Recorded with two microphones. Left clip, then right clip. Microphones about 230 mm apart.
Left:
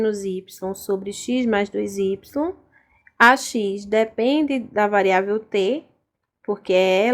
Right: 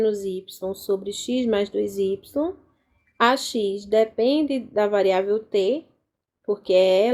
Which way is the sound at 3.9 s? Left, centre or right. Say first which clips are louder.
Even; left.